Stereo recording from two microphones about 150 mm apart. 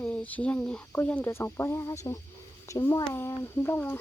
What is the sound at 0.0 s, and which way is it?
A child's voice, 10° left (ahead or behind).